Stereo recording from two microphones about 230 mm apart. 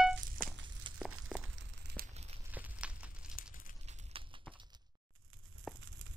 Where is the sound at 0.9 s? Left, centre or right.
Right.